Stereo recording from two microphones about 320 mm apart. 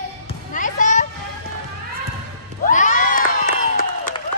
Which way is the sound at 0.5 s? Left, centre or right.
Left.